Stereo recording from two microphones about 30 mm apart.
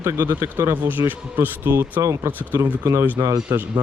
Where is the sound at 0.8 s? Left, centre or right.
Right.